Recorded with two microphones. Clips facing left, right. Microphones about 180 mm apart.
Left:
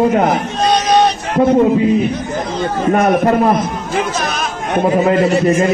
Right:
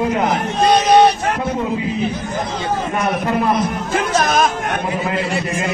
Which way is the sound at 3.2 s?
45° left (ahead or behind).